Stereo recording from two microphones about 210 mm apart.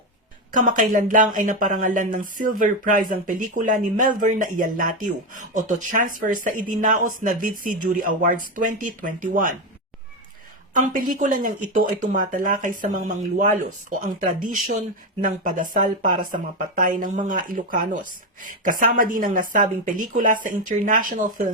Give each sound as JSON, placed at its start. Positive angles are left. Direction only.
{"t": 0.5, "sound": "speech", "side_deg": -40}
{"t": 10.8, "sound": "speech", "side_deg": -40}